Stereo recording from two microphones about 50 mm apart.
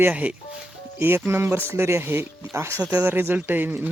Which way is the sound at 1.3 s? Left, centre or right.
Right.